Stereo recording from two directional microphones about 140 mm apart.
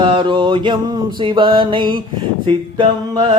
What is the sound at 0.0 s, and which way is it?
Mantra, 35° right (ahead or behind).